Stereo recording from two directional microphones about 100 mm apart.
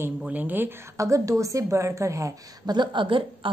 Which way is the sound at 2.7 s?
50° right (ahead or behind).